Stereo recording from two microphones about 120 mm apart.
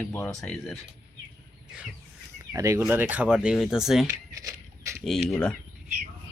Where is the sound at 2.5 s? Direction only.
25° right (ahead or behind); by 4.0 s 5° right (ahead or behind).